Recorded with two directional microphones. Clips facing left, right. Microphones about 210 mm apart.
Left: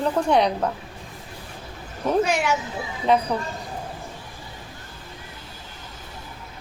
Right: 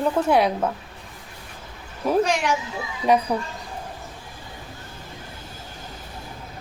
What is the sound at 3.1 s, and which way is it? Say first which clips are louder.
Speech: right 1 dB; 10° right (ahead or behind).